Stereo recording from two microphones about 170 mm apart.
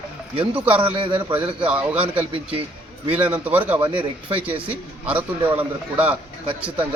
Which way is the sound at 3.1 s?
10° right (ahead or behind).